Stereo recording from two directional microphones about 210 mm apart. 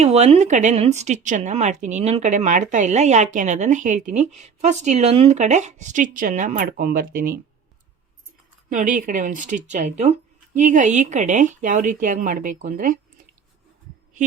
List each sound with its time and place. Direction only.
0.0 s a woman's voice: 30° right (ahead or behind)
8.7 s a woman's voice: 40° right (ahead or behind)